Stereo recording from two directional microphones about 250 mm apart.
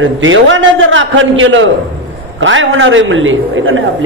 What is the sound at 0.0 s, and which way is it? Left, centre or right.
A man's voice, right.